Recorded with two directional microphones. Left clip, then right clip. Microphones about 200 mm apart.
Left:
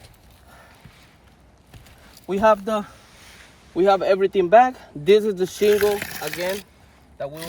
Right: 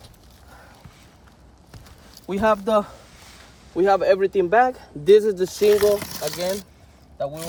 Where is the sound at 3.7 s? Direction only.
40° left (ahead or behind).